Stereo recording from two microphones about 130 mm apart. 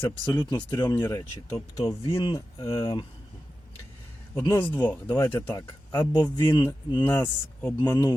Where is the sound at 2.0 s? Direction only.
40° left (ahead or behind).